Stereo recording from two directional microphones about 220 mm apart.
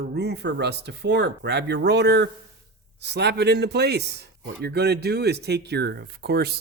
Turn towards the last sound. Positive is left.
turn(degrees=-45)  # may be behind; listen again after turning